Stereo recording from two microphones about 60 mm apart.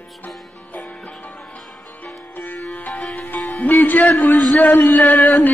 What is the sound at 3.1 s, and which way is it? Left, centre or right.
Music, left.